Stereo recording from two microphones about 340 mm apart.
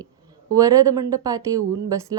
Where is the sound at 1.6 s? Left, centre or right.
Right.